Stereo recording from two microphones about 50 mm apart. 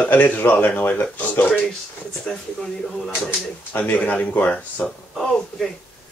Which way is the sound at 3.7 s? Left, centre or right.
Left.